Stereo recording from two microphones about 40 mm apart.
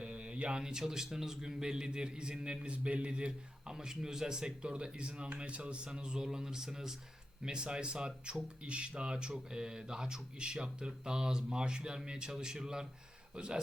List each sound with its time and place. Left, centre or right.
0.0 s a man's voice: right; by 4.7 s centre
4.7 s speech: right